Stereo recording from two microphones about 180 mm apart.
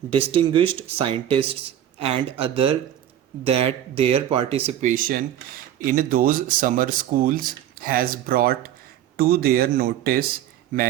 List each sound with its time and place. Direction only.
0.1 s speech: 30° right (ahead or behind); by 10.9 s 50° right (ahead or behind)